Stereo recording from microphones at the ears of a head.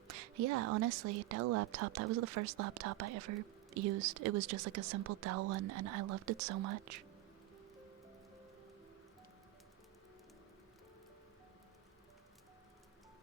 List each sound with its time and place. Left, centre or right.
0.1 s a woman's voice: right